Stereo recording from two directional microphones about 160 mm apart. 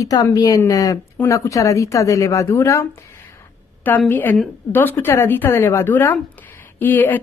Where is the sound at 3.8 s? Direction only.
10° left (ahead or behind).